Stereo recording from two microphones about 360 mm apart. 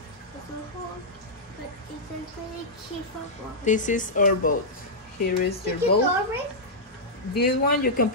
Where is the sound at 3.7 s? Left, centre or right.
Left.